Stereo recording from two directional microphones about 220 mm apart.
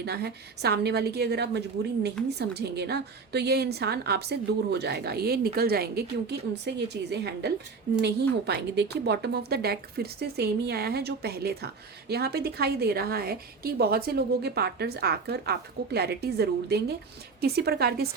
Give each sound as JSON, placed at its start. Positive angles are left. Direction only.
{"t": 0.0, "sound": "a woman's voice", "side_deg": -50}